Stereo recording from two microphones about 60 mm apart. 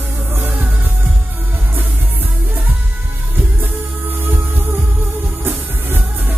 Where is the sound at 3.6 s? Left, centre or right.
Right.